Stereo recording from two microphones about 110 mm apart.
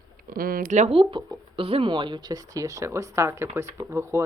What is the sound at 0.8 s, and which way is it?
Speech, 70° right (ahead or behind).